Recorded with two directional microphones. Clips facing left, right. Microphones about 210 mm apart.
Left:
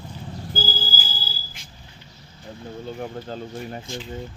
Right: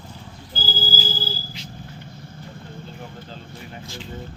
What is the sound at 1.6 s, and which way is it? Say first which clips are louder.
Vehicle: right 9 dB; 50° left (ahead or behind).